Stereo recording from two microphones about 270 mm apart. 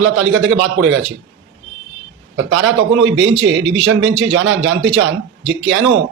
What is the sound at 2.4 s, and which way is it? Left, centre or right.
A man's voice, right.